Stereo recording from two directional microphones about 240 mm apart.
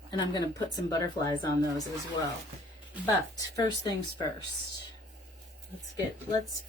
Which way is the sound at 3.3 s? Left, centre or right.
Centre.